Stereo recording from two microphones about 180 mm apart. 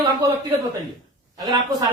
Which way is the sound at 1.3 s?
20° right (ahead or behind).